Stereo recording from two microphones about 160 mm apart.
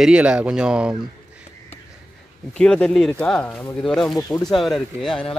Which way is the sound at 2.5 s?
5° left (ahead or behind).